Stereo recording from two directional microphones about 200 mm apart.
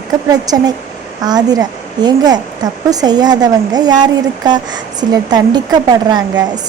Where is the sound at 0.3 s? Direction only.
20° right (ahead or behind).